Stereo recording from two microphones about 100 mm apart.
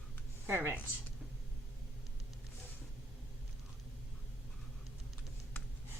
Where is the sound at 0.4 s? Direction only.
25° right (ahead or behind).